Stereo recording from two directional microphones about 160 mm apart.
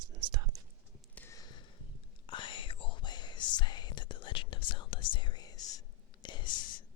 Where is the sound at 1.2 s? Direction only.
20° left (ahead or behind).